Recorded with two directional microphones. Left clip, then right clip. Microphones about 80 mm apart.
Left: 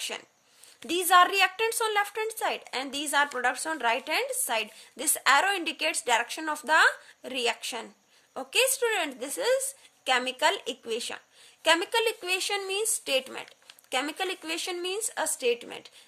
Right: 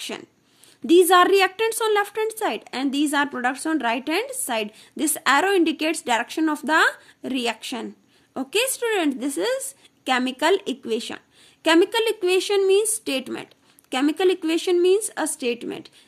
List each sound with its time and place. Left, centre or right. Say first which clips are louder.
0.8 s a woman's voice: right 6 dB; left